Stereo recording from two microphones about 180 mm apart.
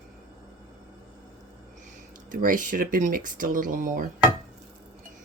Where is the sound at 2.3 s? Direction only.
50° right (ahead or behind).